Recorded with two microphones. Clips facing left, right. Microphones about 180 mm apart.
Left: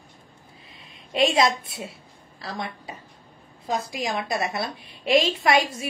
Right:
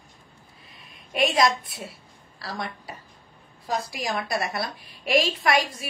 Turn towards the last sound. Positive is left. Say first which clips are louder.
# left 2 dB
turn(degrees=25)  # may be behind; listen again after turning